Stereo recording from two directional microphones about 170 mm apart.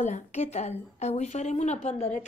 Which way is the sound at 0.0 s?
40° left (ahead or behind).